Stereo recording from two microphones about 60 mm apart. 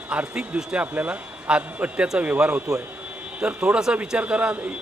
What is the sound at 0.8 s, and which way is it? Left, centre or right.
A man's voice, right.